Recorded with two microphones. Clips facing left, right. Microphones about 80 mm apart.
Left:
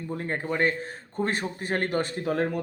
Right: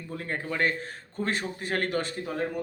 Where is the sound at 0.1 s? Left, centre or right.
Left.